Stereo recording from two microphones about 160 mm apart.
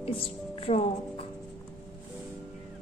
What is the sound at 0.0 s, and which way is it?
Music, 40° left (ahead or behind).